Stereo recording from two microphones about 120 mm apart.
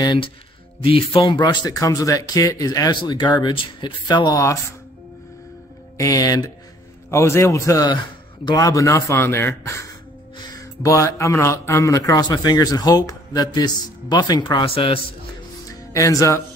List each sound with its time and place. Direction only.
0.0 s speech: 40° left (ahead or behind)
5.9 s a man's voice: 30° left (ahead or behind); by 15.0 s 50° left (ahead or behind)
15.7 s speech: 30° left (ahead or behind)